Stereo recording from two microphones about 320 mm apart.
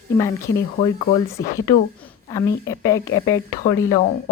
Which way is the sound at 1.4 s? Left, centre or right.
Left.